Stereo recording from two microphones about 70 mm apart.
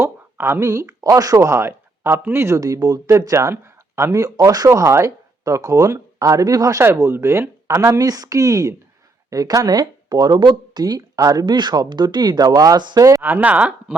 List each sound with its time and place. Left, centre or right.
0.0 s a sound: right
0.7 s speech: right
1.5 s speech: right
2.6 s speech: right
3.1 s speech: right
3.5 s a sound: right
4.1 s speech: right
6.7 s speech: right
7.9 s speech: right
13.2 s speech: right